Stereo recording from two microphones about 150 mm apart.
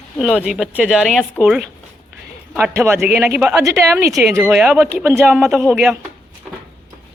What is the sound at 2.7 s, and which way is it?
A woman's voice, 15° right (ahead or behind).